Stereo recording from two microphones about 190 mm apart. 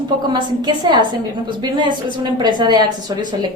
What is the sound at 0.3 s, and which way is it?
Speech, 25° right (ahead or behind).